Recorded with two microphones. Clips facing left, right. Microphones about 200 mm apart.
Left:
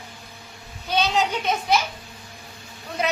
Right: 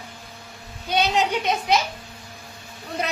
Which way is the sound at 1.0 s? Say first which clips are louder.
Right 1 dB; 15° right (ahead or behind).